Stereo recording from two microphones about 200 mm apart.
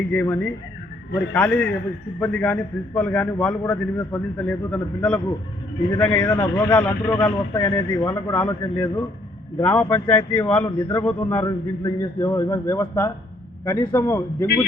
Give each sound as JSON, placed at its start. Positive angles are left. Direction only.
{"t": 0.1, "sound": "a man's voice", "side_deg": 10}